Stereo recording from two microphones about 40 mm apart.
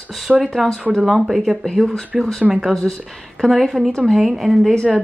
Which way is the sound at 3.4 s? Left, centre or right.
Centre.